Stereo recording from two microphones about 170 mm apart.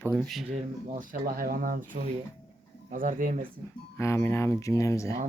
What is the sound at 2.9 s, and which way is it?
Speech, 50° right (ahead or behind).